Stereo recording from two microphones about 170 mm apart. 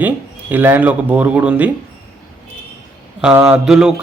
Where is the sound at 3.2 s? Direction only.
5° right (ahead or behind).